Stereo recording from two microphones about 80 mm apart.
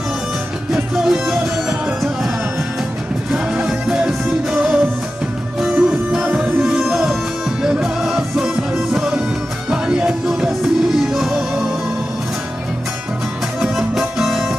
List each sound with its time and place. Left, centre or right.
0.9 s music: centre
3.6 s music: centre; by 6.5 s right
6.6 s music: centre
13.6 s music: centre